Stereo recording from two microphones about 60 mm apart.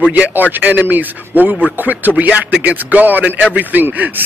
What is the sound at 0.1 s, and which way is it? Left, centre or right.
A man's voice, right.